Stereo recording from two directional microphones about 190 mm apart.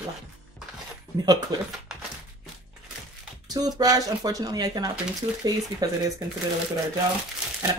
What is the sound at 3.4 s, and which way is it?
Speech, 20° right (ahead or behind).